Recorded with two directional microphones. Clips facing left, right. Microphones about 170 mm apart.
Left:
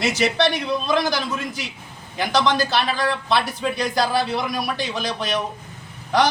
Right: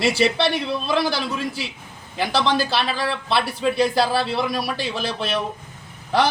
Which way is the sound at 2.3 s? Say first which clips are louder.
Left 1 dB; 30° right (ahead or behind).